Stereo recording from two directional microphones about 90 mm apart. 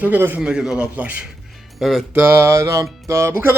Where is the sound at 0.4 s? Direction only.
10° right (ahead or behind).